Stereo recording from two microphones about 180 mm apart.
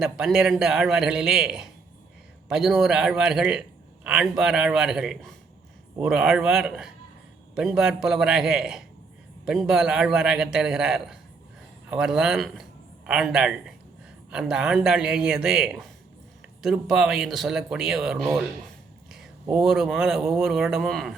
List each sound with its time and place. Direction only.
0.0 s a man's voice: centre (ahead or behind)